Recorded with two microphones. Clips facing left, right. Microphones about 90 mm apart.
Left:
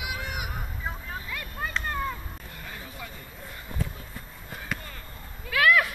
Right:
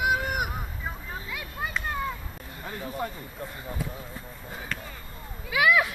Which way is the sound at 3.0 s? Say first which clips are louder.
Right 12 dB; 40° right (ahead or behind).